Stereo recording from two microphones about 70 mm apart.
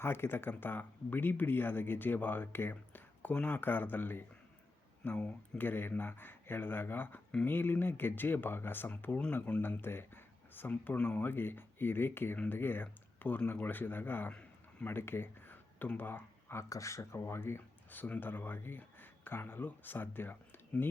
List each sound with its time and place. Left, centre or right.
0.0 s speech: left
5.1 s speech: centre
5.6 s speech: left
16.6 s speech: left